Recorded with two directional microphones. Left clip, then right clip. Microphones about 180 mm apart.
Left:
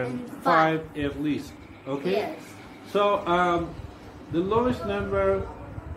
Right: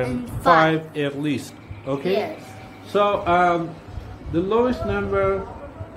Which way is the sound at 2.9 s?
35° right (ahead or behind).